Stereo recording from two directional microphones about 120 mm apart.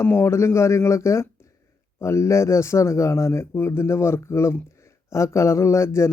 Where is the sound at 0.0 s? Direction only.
20° left (ahead or behind).